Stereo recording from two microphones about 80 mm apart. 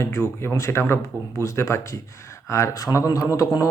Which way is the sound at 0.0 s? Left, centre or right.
Left.